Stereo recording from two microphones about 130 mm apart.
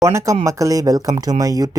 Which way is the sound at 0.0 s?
25° right (ahead or behind).